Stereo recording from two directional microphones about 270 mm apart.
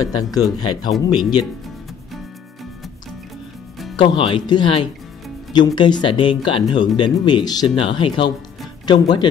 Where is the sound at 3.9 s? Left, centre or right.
Centre.